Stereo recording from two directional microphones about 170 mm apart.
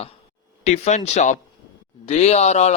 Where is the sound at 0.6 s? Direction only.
40° left (ahead or behind).